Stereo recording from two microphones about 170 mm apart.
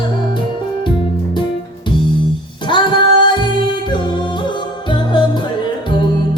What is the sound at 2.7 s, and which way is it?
Music, 25° left (ahead or behind).